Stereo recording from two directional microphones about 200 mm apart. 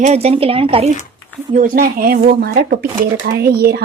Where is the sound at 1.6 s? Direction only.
40° right (ahead or behind).